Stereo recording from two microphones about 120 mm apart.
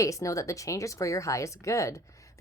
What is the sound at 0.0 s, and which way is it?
Speech, 25° left (ahead or behind).